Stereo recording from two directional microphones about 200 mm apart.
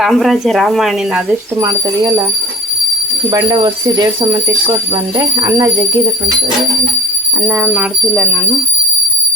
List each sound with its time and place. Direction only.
0.0 s speech: centre (ahead or behind)
1.6 s speech: 15° right (ahead or behind)
3.2 s speech: 20° right (ahead or behind)
7.4 s speech: 10° right (ahead or behind)